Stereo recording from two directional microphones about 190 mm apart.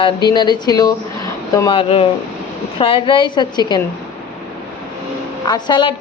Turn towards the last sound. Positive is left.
turn(degrees=25)  # may be behind; listen again after turning